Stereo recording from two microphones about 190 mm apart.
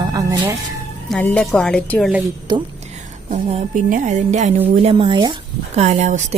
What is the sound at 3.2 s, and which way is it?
Speech, 40° right (ahead or behind).